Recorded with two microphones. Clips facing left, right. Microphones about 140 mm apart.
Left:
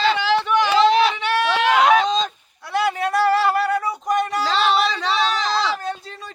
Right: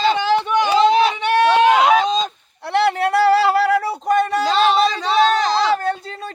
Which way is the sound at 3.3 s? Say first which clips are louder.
Right 4 dB; 85° right.